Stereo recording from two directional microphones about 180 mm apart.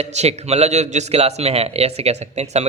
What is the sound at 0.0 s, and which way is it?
Speech, 35° right (ahead or behind).